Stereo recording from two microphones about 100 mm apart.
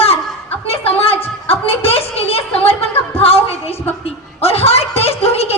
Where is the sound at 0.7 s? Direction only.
75° left (ahead or behind).